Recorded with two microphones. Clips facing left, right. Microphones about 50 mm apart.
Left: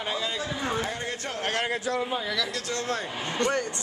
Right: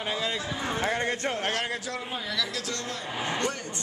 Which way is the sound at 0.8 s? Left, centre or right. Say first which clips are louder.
Right 5 dB; right.